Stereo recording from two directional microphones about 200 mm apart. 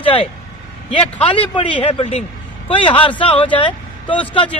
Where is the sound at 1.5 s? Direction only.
30° left (ahead or behind).